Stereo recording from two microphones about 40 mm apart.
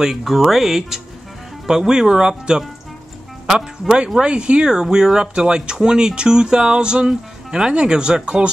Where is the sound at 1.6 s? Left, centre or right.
Centre.